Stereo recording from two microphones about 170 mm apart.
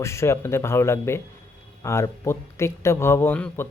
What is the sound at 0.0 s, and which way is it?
Speech, 15° left (ahead or behind).